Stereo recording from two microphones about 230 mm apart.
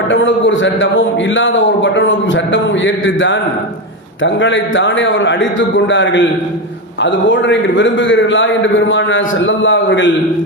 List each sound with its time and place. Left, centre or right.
0.1 s a man's voice: left